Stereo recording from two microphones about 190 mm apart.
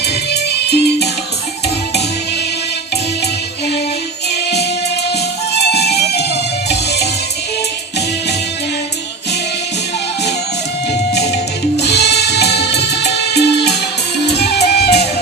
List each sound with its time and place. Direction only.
0.0 s music: 60° left (ahead or behind)
5.5 s music: 60° left (ahead or behind)
11.1 s music: 60° left (ahead or behind)